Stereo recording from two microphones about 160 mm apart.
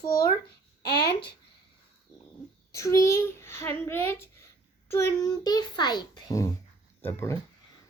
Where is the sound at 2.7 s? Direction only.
20° left (ahead or behind).